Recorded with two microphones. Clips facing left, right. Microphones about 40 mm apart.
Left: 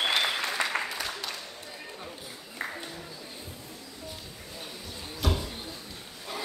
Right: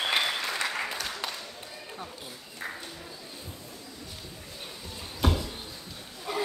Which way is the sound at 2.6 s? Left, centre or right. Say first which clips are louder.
Left 2 dB; left.